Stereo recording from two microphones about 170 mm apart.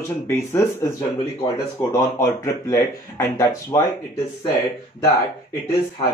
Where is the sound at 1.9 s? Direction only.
15° left (ahead or behind).